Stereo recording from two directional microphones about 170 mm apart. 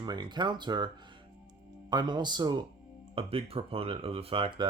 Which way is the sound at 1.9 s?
25° right (ahead or behind).